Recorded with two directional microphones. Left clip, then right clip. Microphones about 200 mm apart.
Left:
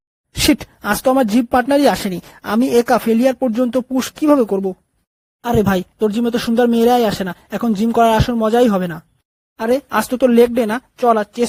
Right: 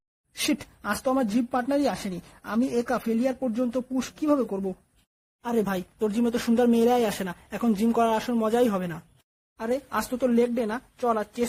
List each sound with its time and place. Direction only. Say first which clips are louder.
0.3 s speech: left 12 dB; 35° left (ahead or behind)